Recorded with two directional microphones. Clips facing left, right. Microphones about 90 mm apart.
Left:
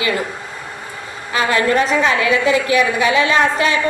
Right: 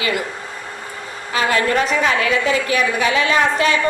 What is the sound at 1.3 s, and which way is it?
A woman's voice, 30° left (ahead or behind).